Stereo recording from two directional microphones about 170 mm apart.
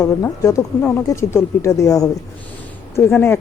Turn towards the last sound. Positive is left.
turn(degrees=15)  # may be behind; listen again after turning